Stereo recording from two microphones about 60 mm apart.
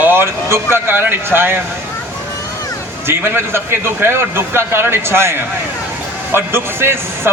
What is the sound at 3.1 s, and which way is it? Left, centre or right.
A man's voice, right.